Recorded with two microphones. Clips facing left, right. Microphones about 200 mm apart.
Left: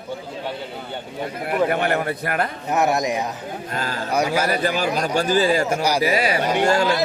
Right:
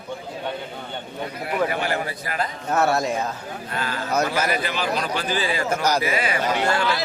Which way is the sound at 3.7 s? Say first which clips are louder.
Left 1 dB; 40° left (ahead or behind).